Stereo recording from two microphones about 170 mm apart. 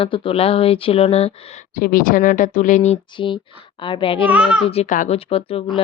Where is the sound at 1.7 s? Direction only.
55° left (ahead or behind).